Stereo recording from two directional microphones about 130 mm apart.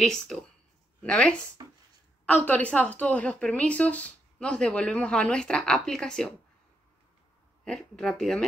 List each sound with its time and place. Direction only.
0.0 s a woman's voice: centre (ahead or behind)
7.6 s speech: 5° left (ahead or behind)